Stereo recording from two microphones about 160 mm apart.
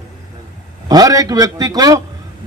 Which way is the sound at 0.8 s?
25° right (ahead or behind).